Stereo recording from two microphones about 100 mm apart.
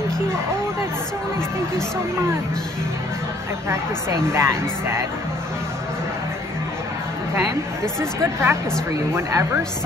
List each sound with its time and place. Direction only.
4.3 s speech: 25° right (ahead or behind)
8.0 s speech: 25° right (ahead or behind)